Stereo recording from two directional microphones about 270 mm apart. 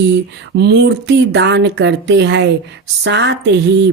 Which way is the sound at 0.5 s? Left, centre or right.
Right.